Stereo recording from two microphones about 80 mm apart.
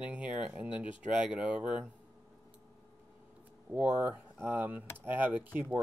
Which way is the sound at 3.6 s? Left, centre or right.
Centre.